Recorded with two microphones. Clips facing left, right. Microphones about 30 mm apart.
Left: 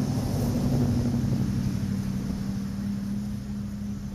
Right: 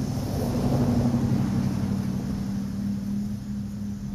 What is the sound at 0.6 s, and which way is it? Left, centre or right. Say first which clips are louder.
Vehicle: right 5 dB; right.